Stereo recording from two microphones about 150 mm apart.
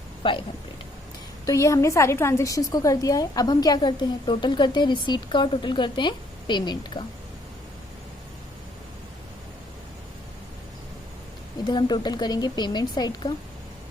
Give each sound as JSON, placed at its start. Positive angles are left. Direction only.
{"t": 0.2, "sound": "speech", "side_deg": 35}
{"t": 1.5, "sound": "a woman's voice", "side_deg": 20}
{"t": 11.6, "sound": "a woman's voice", "side_deg": 30}